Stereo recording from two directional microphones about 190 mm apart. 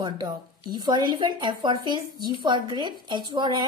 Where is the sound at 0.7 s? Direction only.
25° right (ahead or behind).